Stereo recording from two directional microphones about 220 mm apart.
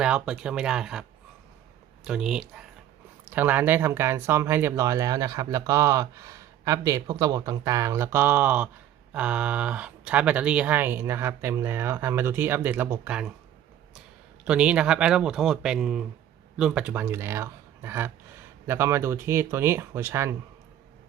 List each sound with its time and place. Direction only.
0.0 s speech: 5° right (ahead or behind)
2.0 s speech: 5° right (ahead or behind)
14.4 s speech: 5° right (ahead or behind)